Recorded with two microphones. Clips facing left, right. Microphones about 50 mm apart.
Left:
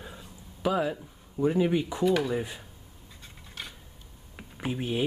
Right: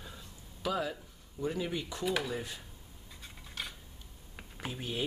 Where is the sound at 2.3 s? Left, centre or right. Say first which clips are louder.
Left 7 dB; centre.